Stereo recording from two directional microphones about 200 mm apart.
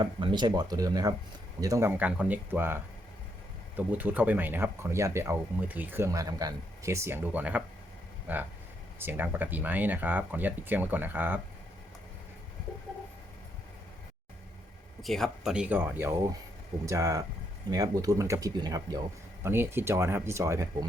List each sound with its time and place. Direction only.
0.0 s speech: 25° right (ahead or behind)
3.8 s speech: 10° right (ahead or behind)
15.0 s speech: centre (ahead or behind); by 20.7 s 15° right (ahead or behind)